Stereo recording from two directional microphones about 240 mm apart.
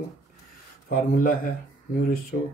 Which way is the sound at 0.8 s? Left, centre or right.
Left.